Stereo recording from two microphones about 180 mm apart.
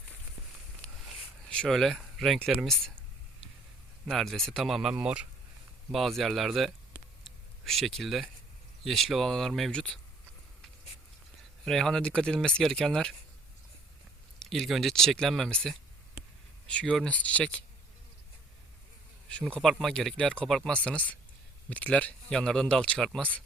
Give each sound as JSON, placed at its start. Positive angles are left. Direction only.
{"t": 1.5, "sound": "speech", "side_deg": 5}
{"t": 4.0, "sound": "speech", "side_deg": 0}
{"t": 11.6, "sound": "speech", "side_deg": 5}
{"t": 14.5, "sound": "speech", "side_deg": 0}
{"t": 19.3, "sound": "speech", "side_deg": 5}